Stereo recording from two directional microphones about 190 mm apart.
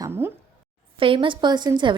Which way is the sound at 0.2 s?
10° right (ahead or behind).